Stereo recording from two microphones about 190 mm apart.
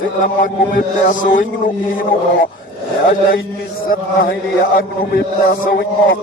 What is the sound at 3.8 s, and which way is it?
A man's voice, 50° left (ahead or behind).